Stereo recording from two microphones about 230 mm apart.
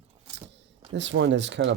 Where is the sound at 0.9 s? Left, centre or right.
Right.